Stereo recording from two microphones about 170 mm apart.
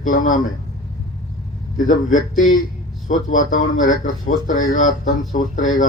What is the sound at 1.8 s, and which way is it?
Speech, 50° left (ahead or behind).